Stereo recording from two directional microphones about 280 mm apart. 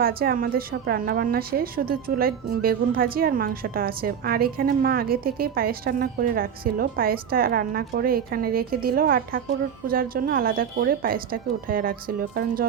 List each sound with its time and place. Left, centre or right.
0.0 s a woman's voice: right